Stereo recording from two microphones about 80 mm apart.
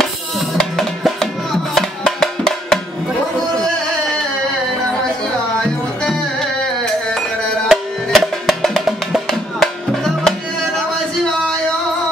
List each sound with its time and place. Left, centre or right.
0.0 s music: centre
6.0 s music: centre